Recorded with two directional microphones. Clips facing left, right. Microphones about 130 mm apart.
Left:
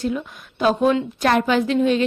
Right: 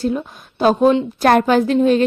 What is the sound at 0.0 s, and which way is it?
A woman's voice, 35° right (ahead or behind).